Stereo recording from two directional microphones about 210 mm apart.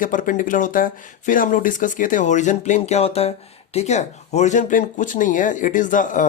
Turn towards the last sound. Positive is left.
turn(degrees=40)  # may be behind; listen again after turning